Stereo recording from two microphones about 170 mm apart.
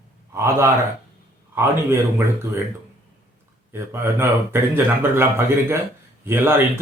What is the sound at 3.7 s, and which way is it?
Speech, 15° right (ahead or behind).